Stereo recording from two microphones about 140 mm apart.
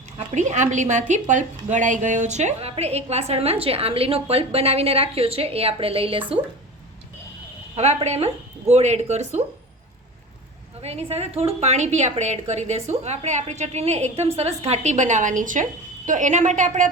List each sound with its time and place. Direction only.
0.3 s a woman's voice: 60° right (ahead or behind); by 6.2 s 40° right (ahead or behind)
8.0 s a woman's voice: 50° right (ahead or behind)
10.8 s a woman's voice: 50° right (ahead or behind); by 16.9 s 65° right (ahead or behind)